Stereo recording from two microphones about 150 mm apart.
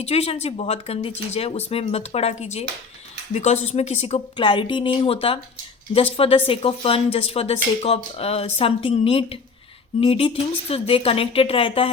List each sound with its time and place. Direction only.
0.0 s speech: 40° left (ahead or behind)